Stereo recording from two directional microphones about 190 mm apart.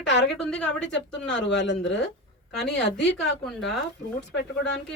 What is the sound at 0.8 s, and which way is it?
Speech, 70° left (ahead or behind).